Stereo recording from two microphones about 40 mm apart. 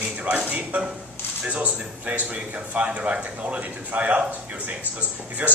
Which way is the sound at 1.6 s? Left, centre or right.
Right.